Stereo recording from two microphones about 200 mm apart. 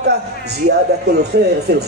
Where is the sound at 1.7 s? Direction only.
55° right (ahead or behind).